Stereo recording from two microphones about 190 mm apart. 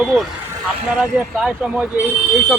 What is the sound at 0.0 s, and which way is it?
Speech, centre (ahead or behind).